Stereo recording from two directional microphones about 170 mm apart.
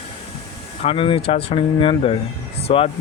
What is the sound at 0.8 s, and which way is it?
Speech, 30° left (ahead or behind).